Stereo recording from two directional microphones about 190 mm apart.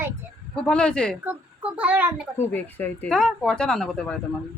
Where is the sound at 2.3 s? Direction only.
10° left (ahead or behind).